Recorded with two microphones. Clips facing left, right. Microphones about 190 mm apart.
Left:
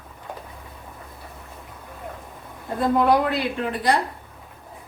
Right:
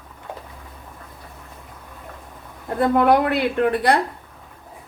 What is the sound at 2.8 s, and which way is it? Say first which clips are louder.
A man's voice: right 2 dB; 60° right (ahead or behind).